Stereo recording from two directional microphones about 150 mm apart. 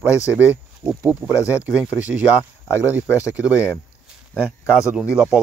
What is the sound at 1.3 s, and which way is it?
Speech, 20° left (ahead or behind).